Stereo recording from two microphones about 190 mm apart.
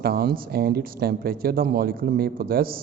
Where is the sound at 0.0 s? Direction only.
55° right (ahead or behind).